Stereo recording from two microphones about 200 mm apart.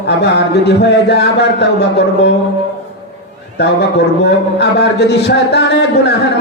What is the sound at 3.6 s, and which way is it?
A man's voice, 55° left (ahead or behind).